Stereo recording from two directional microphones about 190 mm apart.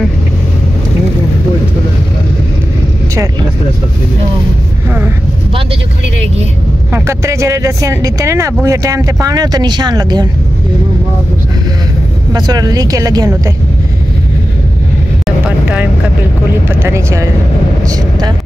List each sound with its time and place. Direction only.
6.9 s speech: 15° right (ahead or behind)
12.3 s speech: 20° right (ahead or behind)
15.2 s vehicle: 5° right (ahead or behind)
16.6 s speech: 15° right (ahead or behind)